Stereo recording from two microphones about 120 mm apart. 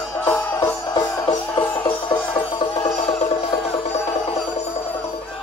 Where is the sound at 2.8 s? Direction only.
55° left (ahead or behind).